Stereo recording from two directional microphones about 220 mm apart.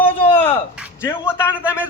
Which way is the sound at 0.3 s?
25° left (ahead or behind).